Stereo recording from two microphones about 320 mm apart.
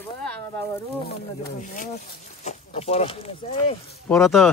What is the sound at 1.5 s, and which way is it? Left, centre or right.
Speech, left.